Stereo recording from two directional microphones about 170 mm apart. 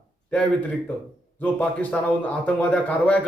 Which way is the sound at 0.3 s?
5° left (ahead or behind).